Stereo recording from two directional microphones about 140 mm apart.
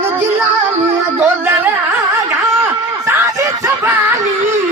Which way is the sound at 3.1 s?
20° right (ahead or behind).